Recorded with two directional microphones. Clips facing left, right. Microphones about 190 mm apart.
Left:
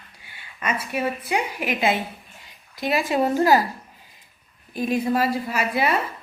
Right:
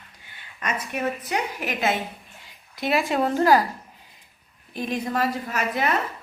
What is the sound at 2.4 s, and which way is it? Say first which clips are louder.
A woman's voice: left 1 dB; centre (ahead or behind).